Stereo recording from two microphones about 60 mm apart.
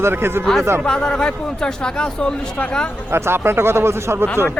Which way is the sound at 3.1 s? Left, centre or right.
Right.